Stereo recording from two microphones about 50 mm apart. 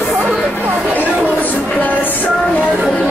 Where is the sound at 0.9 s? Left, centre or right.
Left.